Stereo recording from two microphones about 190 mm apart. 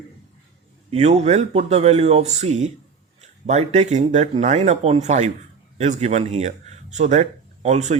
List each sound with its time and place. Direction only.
0.9 s speech: 35° right (ahead or behind)